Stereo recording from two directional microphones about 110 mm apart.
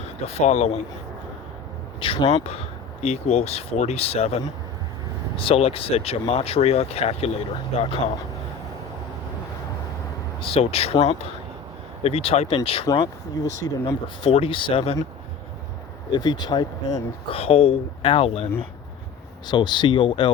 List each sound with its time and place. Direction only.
0.3 s speech: 75° left (ahead or behind)
2.0 s speech: 55° left (ahead or behind)
3.0 s speech: 75° left (ahead or behind)
10.4 s speech: 60° left (ahead or behind)
12.9 s speech: 35° left (ahead or behind)
14.2 s speech: 55° left (ahead or behind)
16.1 s speech: 45° left (ahead or behind)
17.3 s speech: 60° left (ahead or behind)
19.5 s speech: 40° left (ahead or behind)